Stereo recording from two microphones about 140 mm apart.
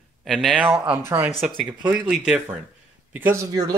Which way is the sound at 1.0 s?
15° right (ahead or behind).